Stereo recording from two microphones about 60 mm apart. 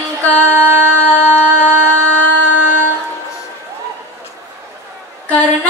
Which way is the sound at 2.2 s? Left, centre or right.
Left.